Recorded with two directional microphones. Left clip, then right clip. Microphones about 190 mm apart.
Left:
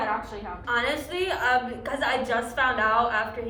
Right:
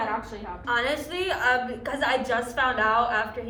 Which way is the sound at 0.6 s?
Centre (ahead or behind).